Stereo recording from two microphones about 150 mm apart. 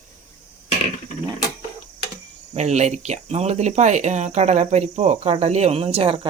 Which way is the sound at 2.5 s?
50° right (ahead or behind).